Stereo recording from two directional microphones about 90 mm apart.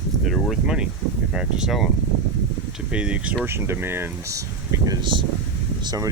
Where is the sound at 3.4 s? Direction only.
25° right (ahead or behind).